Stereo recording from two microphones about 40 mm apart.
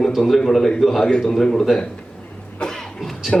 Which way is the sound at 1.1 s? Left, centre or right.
Left.